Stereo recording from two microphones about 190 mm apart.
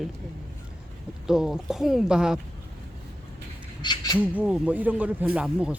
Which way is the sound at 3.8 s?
25° left (ahead or behind).